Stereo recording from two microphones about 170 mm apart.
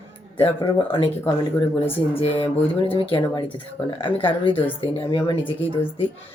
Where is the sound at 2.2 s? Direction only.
35° left (ahead or behind).